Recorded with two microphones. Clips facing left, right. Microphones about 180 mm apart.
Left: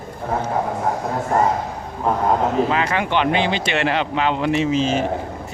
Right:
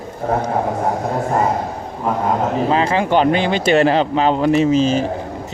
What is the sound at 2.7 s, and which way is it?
Speech, 30° right (ahead or behind).